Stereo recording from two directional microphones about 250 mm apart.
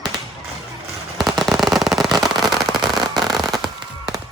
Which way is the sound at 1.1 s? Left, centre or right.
Centre.